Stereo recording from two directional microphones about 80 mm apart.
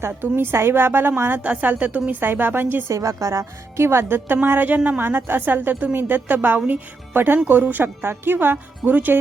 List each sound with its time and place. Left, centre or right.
0.1 s a woman's voice: right
2.9 s a woman's voice: right